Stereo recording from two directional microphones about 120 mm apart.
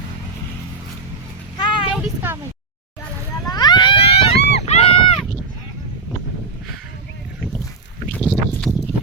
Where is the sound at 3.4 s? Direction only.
35° left (ahead or behind); by 5.2 s 55° left (ahead or behind).